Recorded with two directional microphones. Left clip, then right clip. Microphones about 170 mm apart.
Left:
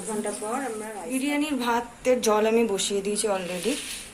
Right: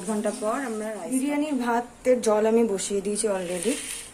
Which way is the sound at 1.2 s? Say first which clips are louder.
Left 1 dB; 40° right (ahead or behind).